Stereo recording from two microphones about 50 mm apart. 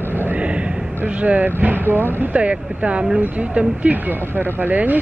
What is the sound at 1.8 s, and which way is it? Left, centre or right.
Speech, right.